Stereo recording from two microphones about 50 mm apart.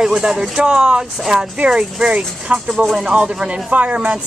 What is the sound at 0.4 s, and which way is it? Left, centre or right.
Speech, centre.